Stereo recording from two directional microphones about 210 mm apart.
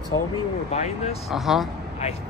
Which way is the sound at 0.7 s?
30° left (ahead or behind).